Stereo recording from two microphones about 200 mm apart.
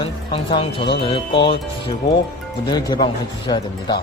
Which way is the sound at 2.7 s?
20° left (ahead or behind).